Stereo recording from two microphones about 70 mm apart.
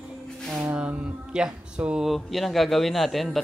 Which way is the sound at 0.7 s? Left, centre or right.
Centre.